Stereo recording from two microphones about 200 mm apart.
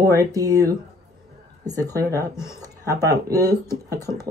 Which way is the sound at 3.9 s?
20° right (ahead or behind).